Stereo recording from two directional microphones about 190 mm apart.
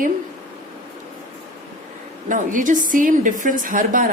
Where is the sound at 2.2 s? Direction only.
45° right (ahead or behind).